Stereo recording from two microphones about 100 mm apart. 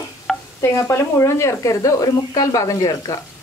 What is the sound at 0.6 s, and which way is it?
Speech, 25° left (ahead or behind).